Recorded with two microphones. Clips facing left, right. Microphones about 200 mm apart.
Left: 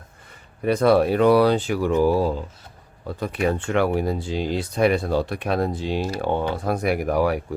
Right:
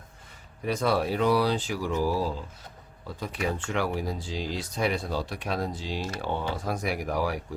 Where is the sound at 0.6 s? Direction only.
60° left (ahead or behind).